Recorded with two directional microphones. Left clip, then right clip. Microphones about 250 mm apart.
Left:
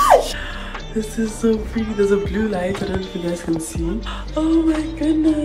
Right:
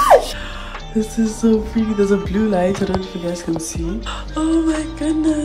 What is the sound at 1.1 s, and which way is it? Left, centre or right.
Speech, centre.